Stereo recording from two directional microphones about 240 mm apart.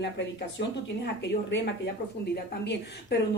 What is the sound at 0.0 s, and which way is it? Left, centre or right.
Speech, left.